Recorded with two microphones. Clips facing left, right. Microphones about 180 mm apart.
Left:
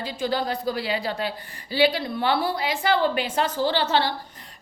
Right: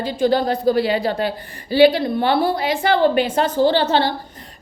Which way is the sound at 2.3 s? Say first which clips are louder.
Right 6 dB; 50° right (ahead or behind).